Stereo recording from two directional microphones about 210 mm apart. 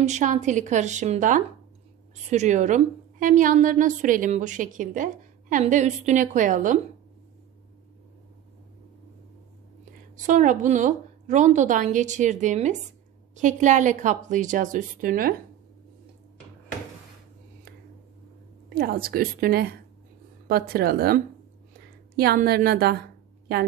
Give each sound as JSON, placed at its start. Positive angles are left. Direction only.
{"t": 0.0, "sound": "a woman's voice", "side_deg": -35}
{"t": 10.2, "sound": "a woman's voice", "side_deg": -35}
{"t": 18.8, "sound": "a woman's voice", "side_deg": -45}